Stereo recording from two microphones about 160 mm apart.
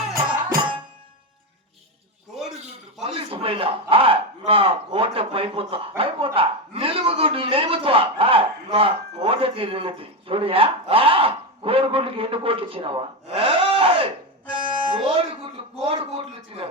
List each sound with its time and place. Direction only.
3.0 s a man's voice: 35° right (ahead or behind)
14.5 s music: 30° right (ahead or behind)
15.8 s a sound: 35° right (ahead or behind)